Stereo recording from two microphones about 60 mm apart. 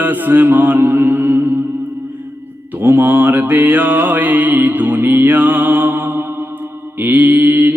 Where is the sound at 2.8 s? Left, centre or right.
Right.